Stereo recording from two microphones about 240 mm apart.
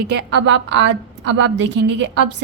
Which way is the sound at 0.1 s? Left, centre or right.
Right.